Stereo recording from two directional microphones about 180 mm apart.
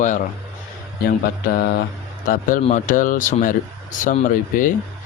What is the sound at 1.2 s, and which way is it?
A man's voice, 60° left (ahead or behind).